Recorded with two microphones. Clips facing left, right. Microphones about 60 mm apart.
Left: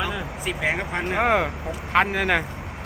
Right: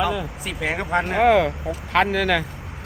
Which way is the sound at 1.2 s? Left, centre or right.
Centre.